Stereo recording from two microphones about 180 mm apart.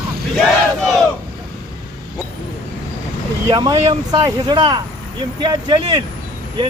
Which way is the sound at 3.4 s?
25° right (ahead or behind).